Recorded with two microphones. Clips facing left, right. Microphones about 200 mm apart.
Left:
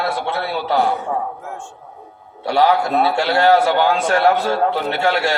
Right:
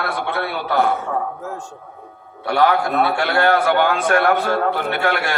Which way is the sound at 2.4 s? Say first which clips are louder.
Left 1 dB; 55° right (ahead or behind).